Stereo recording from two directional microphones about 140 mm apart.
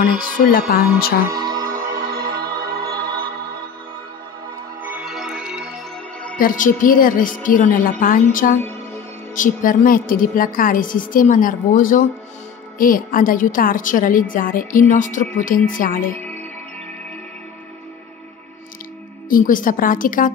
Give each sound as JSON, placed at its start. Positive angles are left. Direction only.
{"t": 0.2, "sound": "music", "side_deg": 90}
{"t": 1.3, "sound": "music", "side_deg": -30}
{"t": 2.3, "sound": "music", "side_deg": -90}
{"t": 2.8, "sound": "music", "side_deg": -30}
{"t": 4.8, "sound": "music", "side_deg": -10}
{"t": 6.3, "sound": "a woman's voice", "side_deg": 75}
{"t": 8.3, "sound": "a woman's voice", "side_deg": 75}
{"t": 19.2, "sound": "a woman's voice", "side_deg": 75}